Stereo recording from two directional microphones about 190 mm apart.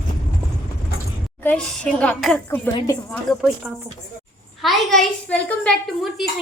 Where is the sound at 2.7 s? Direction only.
15° left (ahead or behind).